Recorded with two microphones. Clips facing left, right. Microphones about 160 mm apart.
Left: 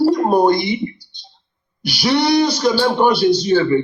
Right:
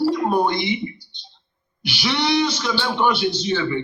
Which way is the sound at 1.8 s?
40° left (ahead or behind).